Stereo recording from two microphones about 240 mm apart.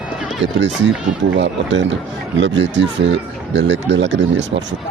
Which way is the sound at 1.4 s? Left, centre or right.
Right.